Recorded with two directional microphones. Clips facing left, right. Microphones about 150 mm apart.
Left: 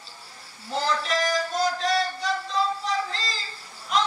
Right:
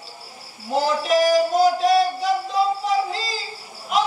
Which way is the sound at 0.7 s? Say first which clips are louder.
Right 6 dB; 10° right (ahead or behind).